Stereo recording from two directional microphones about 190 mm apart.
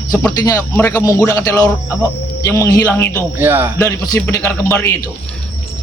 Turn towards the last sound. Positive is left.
turn(degrees=10)  # may be behind; listen again after turning